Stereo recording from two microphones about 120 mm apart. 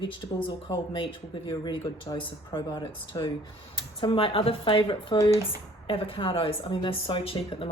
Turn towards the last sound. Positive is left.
turn(degrees=50)  # may be behind; listen again after turning